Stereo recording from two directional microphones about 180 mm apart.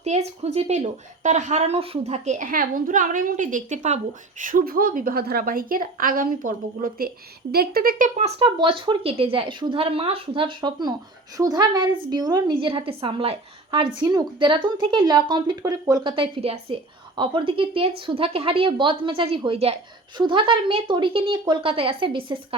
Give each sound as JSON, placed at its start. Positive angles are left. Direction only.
{"t": 0.0, "sound": "a woman's voice", "side_deg": -35}